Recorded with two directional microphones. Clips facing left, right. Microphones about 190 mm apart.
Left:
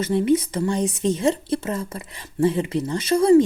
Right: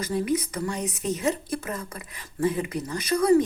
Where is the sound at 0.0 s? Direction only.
25° left (ahead or behind).